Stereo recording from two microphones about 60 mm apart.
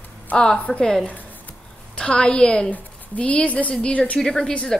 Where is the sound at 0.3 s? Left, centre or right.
Left.